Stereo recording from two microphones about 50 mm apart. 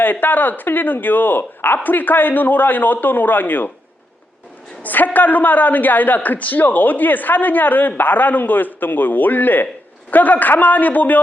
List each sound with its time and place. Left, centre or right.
0.0 s a woman's voice: left
4.8 s a woman's voice: left